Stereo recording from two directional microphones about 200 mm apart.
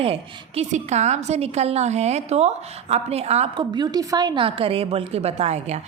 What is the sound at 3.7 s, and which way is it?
A woman's voice, 20° right (ahead or behind).